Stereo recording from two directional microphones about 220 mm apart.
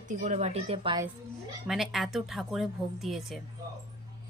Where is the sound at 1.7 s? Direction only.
Centre (ahead or behind).